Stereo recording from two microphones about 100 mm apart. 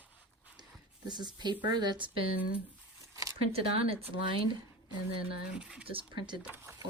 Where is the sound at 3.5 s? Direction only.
75° right (ahead or behind).